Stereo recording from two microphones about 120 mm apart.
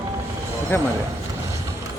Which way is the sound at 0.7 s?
20° left (ahead or behind).